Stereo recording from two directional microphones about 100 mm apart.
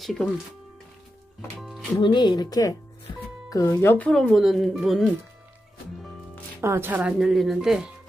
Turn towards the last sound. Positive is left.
turn(degrees=-5)  # may be behind; listen again after turning